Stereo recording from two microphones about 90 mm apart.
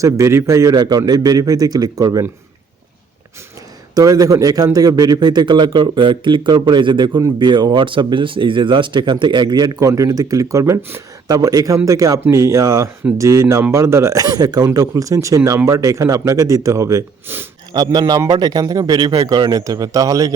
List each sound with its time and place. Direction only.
0.0 s speech: 30° right (ahead or behind)
0.7 s a man's voice: 50° right (ahead or behind)
3.9 s a man's voice: 40° right (ahead or behind)
17.7 s a man's voice: 50° right (ahead or behind)